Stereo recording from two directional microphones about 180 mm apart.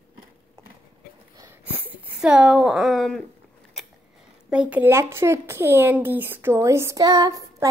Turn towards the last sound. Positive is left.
turn(degrees=-20)  # may be behind; listen again after turning